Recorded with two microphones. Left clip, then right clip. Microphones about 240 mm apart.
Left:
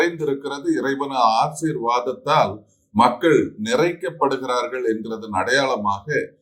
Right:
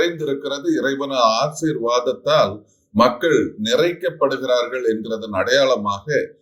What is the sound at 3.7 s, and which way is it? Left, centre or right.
Speech, centre.